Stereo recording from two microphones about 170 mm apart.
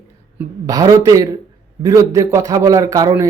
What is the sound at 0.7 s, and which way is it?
A man's voice, 20° right (ahead or behind).